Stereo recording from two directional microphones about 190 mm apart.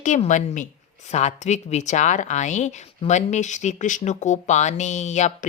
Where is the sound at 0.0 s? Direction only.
40° left (ahead or behind).